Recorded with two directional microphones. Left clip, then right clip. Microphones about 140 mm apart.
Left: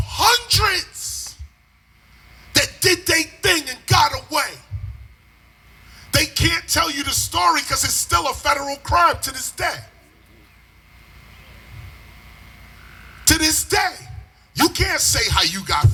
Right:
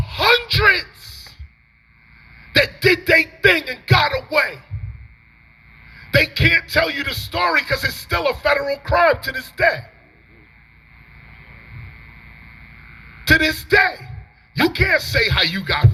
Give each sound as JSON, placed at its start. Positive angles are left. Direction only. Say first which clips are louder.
{"t": 0.0, "sound": "a sound", "louder": "right 1 dB", "side_deg": 20}
{"t": 2.5, "sound": "music", "louder": "right 2 dB", "side_deg": 20}
{"t": 5.9, "sound": "speech", "louder": "right 3 dB", "side_deg": 25}
{"t": 13.2, "sound": "speech", "louder": "right 3 dB", "side_deg": 20}
{"t": 14.5, "sound": "music", "louder": "right 2 dB", "side_deg": 20}